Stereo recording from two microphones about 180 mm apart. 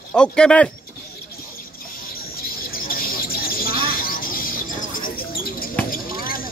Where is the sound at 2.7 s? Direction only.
55° left (ahead or behind).